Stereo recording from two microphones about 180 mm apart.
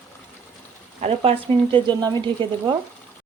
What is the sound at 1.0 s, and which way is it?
Speech, 30° right (ahead or behind).